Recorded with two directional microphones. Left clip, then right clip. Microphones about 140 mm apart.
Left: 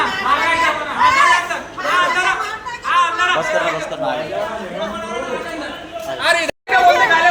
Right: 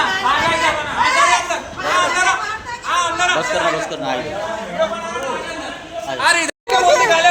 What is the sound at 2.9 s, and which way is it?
Chatter, 35° right (ahead or behind).